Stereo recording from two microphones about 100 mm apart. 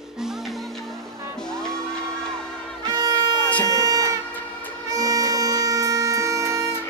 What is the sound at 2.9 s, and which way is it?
Music, 40° right (ahead or behind).